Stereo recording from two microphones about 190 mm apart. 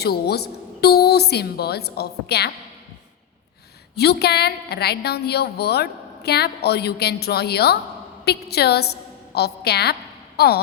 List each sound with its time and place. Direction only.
0.0 s a woman's voice: 55° left (ahead or behind)
3.9 s a woman's voice: 60° left (ahead or behind)